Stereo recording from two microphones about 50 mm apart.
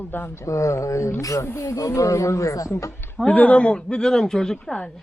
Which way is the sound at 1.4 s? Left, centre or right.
Left.